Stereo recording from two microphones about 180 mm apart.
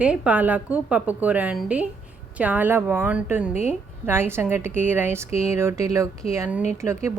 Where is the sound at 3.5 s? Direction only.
35° left (ahead or behind).